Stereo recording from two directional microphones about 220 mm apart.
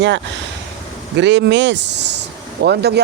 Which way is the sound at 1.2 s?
55° right (ahead or behind).